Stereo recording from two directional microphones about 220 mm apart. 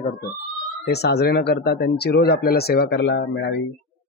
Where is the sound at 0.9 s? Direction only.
45° left (ahead or behind).